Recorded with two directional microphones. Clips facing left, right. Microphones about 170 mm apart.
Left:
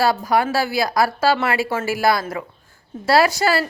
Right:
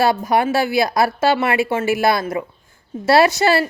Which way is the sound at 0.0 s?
20° right (ahead or behind).